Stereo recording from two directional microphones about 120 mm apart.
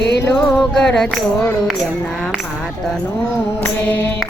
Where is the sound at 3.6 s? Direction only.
15° left (ahead or behind).